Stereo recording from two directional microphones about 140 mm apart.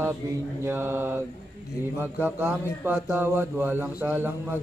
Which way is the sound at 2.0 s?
10° right (ahead or behind).